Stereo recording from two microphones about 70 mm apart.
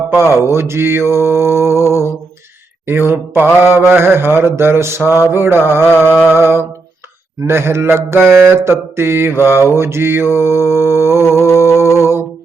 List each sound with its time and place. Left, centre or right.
0.3 s mantra: right
11.5 s music: right